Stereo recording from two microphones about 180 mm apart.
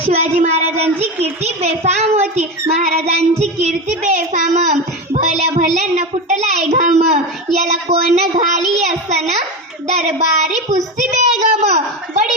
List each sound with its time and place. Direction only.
0.0 s a child's voice: 40° right (ahead or behind)